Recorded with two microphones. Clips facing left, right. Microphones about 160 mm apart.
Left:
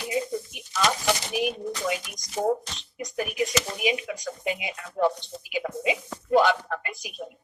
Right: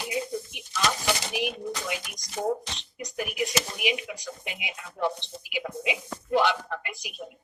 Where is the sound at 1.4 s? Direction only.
45° left (ahead or behind).